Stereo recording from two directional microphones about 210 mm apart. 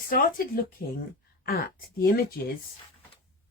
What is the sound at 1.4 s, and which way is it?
Speech, 45° left (ahead or behind).